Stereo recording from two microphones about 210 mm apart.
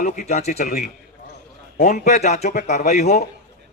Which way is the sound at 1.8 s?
35° left (ahead or behind).